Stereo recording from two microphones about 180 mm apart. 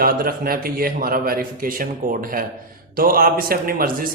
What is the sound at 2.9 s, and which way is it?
A man's voice, 55° right (ahead or behind).